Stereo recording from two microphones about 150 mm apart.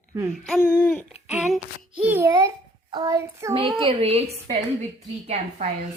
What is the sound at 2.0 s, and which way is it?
Speech, 15° right (ahead or behind).